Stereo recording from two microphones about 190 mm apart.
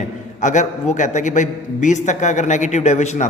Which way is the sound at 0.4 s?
40° left (ahead or behind).